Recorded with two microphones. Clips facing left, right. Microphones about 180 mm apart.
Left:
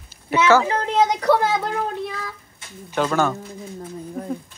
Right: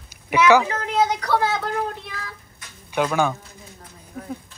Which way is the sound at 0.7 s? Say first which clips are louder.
Left 2 dB; 30° left (ahead or behind).